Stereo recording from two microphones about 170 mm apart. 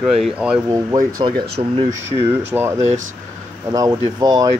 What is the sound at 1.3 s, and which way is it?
Speech, 70° right (ahead or behind).